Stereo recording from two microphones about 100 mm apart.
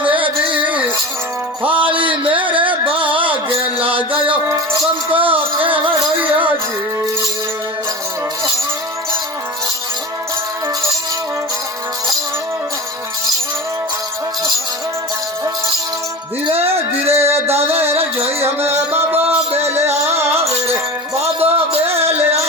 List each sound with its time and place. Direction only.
0.1 s music: 60° right (ahead or behind)
0.7 s music: 15° right (ahead or behind)
1.7 s music: 60° right (ahead or behind)
4.4 s music: 35° right (ahead or behind)
5.1 s a sound: 60° right (ahead or behind)
5.8 s music: 55° right (ahead or behind)
16.5 s music: 80° right
18.9 s music: 20° right (ahead or behind)
19.7 s music: 90° right
20.1 s music: 25° right (ahead or behind)
21.3 s music: 75° right (ahead or behind)
21.9 s music: 90° right